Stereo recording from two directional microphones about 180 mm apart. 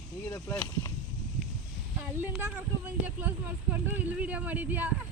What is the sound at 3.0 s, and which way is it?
Speech, 10° right (ahead or behind).